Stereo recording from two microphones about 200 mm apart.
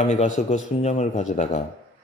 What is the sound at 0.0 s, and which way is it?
Speech, 35° left (ahead or behind).